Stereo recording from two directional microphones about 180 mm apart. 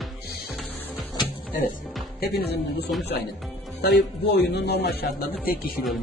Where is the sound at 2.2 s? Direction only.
60° left (ahead or behind).